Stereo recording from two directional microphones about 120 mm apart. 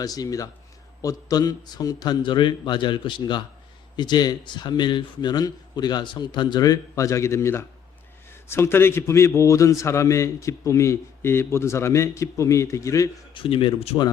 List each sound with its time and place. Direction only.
0.0 s a man's voice: 30° left (ahead or behind)
13.3 s speech: 50° left (ahead or behind)